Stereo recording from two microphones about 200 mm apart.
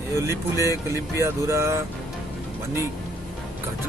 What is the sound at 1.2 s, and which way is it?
Speech, 15° right (ahead or behind).